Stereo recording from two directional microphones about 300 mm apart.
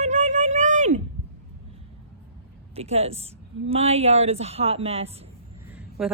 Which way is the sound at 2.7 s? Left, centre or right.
Right.